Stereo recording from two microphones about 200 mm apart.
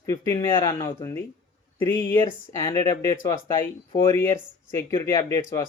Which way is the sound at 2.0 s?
10° left (ahead or behind).